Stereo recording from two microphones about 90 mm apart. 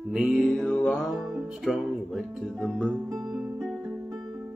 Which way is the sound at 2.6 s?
15° right (ahead or behind).